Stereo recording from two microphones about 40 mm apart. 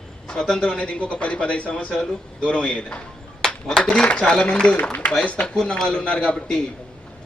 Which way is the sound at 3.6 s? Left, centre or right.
Centre.